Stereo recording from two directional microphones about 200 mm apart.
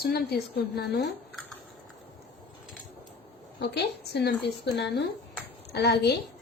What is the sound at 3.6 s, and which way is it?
Speech, 55° left (ahead or behind).